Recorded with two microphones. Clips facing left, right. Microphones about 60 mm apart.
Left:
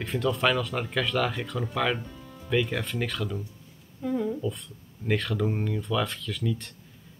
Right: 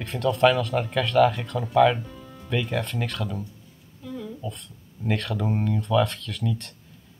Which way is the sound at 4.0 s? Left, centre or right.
Left.